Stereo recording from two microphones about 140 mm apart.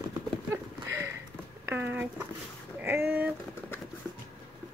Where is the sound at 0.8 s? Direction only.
15° right (ahead or behind).